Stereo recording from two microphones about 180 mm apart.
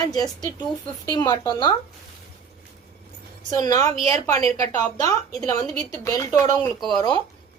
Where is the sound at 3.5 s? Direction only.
20° left (ahead or behind).